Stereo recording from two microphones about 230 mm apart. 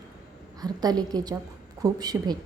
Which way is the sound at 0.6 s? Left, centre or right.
Centre.